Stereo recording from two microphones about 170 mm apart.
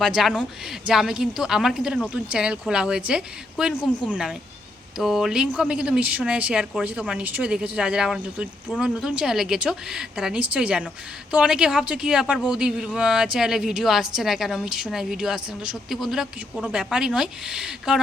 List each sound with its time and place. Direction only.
0.0 s a man's voice: centre (ahead or behind)